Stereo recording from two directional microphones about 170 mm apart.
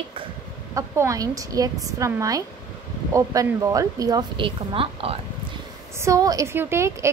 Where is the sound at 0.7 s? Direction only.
15° right (ahead or behind); by 5.2 s 35° right (ahead or behind).